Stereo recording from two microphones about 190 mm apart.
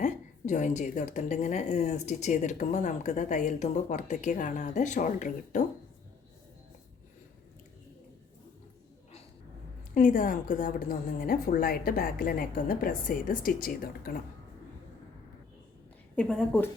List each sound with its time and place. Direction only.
0.0 s a woman's voice: 40° left (ahead or behind)
9.9 s a woman's voice: 45° left (ahead or behind)
16.1 s a woman's voice: 5° left (ahead or behind)